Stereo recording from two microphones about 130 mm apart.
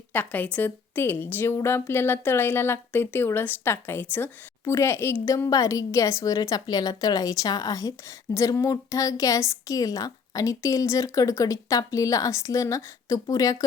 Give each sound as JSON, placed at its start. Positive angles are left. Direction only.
{"t": 0.1, "sound": "a woman's voice", "side_deg": 15}